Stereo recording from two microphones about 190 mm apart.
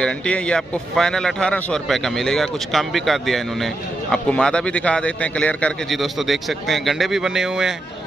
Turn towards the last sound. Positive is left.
turn(degrees=-5)  # may be behind; listen again after turning